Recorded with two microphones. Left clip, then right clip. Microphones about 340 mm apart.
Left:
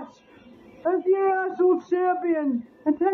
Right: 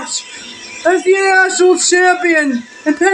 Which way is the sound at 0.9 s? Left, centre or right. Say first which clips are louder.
Right 11 dB; left.